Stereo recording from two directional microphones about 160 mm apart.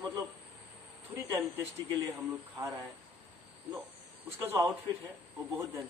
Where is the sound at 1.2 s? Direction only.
20° right (ahead or behind).